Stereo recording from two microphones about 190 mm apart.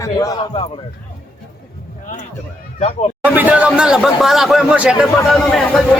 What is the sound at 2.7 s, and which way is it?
Speech, 35° left (ahead or behind).